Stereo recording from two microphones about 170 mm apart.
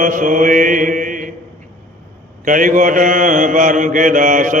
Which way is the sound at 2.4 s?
50° right (ahead or behind).